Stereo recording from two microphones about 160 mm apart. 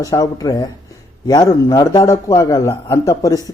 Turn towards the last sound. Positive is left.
turn(degrees=20)  # may be behind; listen again after turning